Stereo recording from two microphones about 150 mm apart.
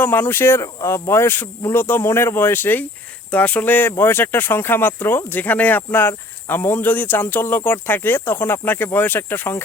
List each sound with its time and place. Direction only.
0.0 s speech: 15° left (ahead or behind)